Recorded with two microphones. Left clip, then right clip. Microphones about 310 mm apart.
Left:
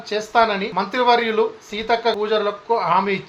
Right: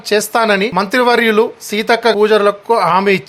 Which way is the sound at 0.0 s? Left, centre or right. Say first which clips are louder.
Right 4 dB; right.